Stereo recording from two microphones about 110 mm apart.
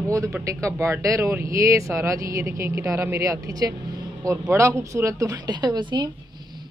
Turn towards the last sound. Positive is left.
turn(degrees=-45)  # may be behind; listen again after turning